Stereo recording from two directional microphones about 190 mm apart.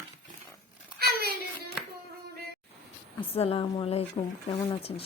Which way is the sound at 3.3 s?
30° left (ahead or behind).